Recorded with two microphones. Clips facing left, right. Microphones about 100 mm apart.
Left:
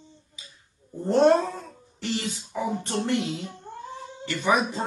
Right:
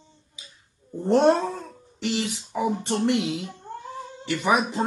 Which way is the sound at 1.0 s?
20° right (ahead or behind).